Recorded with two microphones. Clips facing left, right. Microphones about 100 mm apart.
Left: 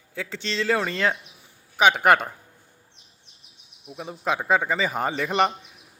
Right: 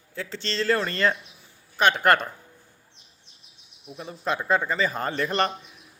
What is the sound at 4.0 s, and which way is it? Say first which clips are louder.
Speech: left 2 dB; 10° left (ahead or behind).